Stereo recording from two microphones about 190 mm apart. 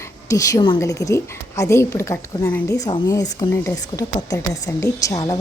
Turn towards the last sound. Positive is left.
turn(degrees=20)  # may be behind; listen again after turning